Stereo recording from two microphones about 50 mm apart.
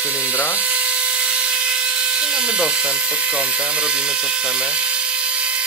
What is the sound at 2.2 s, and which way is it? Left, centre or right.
Speech, centre.